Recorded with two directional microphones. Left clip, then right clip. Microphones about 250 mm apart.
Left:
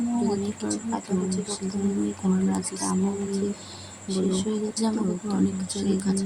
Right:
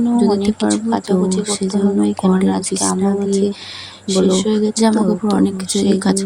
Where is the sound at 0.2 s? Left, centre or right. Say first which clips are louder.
Right 12 dB; right.